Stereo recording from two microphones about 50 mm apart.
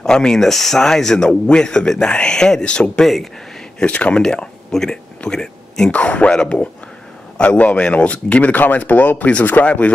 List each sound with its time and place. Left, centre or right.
0.0 s speech: centre
5.9 s speech: left